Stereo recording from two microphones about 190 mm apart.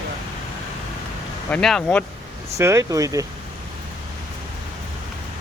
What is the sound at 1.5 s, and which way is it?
Speech, 5° left (ahead or behind).